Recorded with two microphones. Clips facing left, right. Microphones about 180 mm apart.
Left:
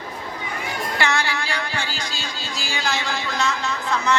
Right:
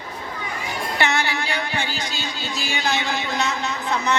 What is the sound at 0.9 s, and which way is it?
Music, 20° right (ahead or behind).